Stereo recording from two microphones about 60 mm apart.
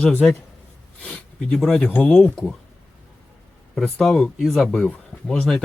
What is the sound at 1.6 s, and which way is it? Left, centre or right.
Speech, centre.